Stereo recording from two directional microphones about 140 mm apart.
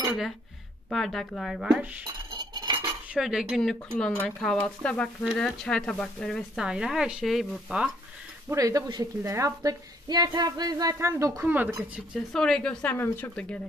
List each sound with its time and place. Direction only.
0.8 s speech: centre (ahead or behind)
2.3 s cutlery: 30° right (ahead or behind)
3.2 s a woman's voice: 5° right (ahead or behind)
8.5 s a woman's voice: 25° right (ahead or behind)
12.3 s a woman's voice: 5° left (ahead or behind)